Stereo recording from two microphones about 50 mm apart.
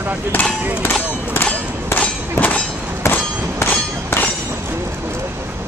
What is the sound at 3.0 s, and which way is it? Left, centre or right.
Clang, left.